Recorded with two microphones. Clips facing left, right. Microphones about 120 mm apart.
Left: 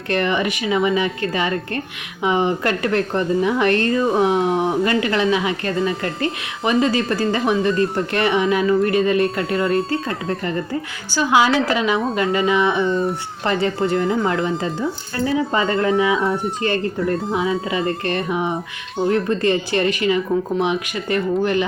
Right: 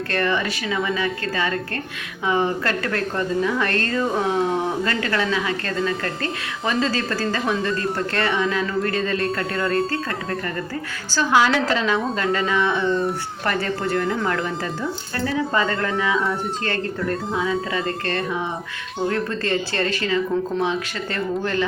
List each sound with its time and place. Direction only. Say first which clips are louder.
0.1 s a woman's voice: left 4 dB; 20° left (ahead or behind)
11.1 s speech: left 2 dB; 15° left (ahead or behind)
12.8 s speech: left 2 dB; centre (ahead or behind)
13.4 s a woman's voice: left 5 dB; 20° left (ahead or behind)
14.0 s speech: left 4 dB; 5° left (ahead or behind)
15.4 s a woman's voice: left 2 dB; 20° left (ahead or behind)
16.1 s speech: left 3 dB; centre (ahead or behind)
17.3 s speech: left 2 dB; 20° left (ahead or behind)